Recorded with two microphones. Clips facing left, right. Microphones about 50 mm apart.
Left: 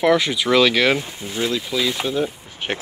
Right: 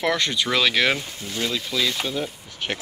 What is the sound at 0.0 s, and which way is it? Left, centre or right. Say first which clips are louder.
Speech: left 6 dB; centre.